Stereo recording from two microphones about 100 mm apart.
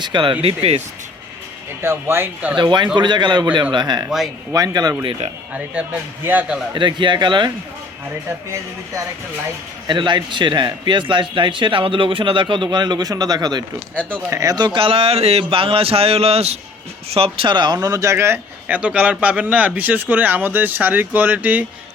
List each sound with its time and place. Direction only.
0.0 s speech: 55° right (ahead or behind); by 0.8 s 70° right (ahead or behind)
1.8 s speech: 25° right (ahead or behind)
2.6 s a man's voice: 50° right (ahead or behind)
5.7 s speech: 15° right (ahead or behind)
6.7 s a man's voice: 50° right (ahead or behind)
9.8 s a man's voice: 50° right (ahead or behind)
13.9 s speech: 15° left (ahead or behind)
14.3 s a man's voice: 35° right (ahead or behind); by 16.6 s 90° right
17.1 s speech: 75° right (ahead or behind); by 17.7 s 50° right (ahead or behind)
17.8 s speech: 35° right (ahead or behind)
18.8 s speech: 10° right (ahead or behind)